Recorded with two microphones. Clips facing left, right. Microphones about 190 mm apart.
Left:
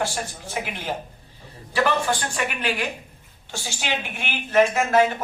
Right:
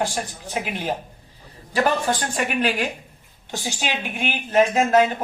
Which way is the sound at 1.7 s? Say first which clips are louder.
Right 1 dB; 40° right (ahead or behind).